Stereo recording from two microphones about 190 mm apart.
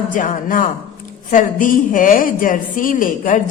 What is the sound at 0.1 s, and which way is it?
A woman's voice, 45° left (ahead or behind).